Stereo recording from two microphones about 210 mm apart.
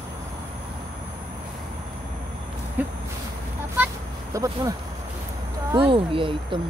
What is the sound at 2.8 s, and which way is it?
Speech, 10° right (ahead or behind).